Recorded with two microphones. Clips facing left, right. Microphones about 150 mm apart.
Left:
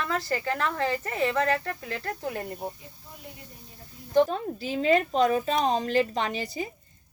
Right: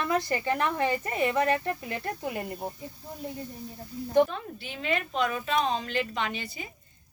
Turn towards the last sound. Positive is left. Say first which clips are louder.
# left 4 dB
turn(degrees=35)  # may be behind; listen again after turning